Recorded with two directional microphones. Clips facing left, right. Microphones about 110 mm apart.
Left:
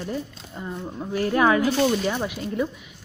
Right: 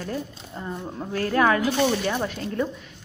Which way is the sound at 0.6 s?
Centre (ahead or behind).